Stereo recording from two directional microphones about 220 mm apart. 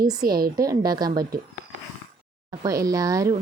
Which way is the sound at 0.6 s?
15° right (ahead or behind).